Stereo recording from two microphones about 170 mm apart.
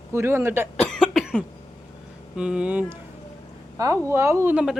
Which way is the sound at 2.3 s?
5° right (ahead or behind).